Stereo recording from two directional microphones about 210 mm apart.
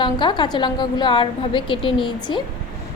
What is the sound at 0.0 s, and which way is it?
A woman's voice, 20° left (ahead or behind).